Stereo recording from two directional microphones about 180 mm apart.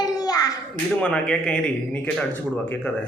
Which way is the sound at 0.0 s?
20° left (ahead or behind).